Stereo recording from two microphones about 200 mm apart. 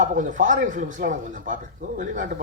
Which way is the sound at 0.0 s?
40° right (ahead or behind).